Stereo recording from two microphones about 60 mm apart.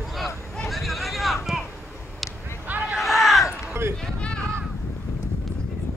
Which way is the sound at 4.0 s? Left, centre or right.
Centre.